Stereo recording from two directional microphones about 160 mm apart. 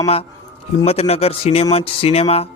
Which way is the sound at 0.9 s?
40° left (ahead or behind).